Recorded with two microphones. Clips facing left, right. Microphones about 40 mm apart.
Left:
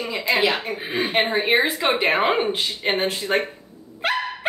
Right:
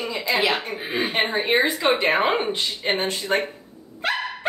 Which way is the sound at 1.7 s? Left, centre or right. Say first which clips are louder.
Even; centre.